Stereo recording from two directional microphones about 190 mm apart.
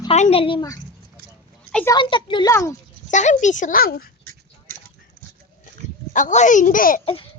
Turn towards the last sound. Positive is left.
turn(degrees=30)  # may be behind; listen again after turning